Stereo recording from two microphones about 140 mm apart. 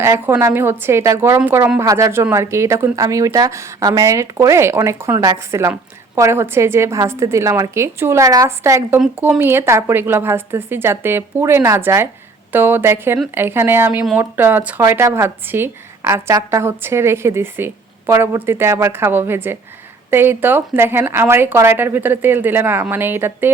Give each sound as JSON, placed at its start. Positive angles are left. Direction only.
{"t": 0.0, "sound": "a woman's voice", "side_deg": -20}